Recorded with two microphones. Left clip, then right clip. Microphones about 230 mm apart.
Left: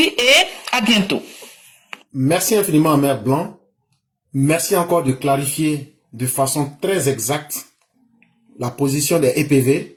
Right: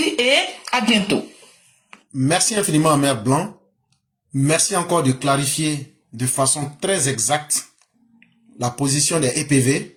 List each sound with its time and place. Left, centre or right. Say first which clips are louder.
0.2 s speech: left 3 dB; left
2.1 s speech: left 3 dB; right
4.4 s speech: left 2 dB; right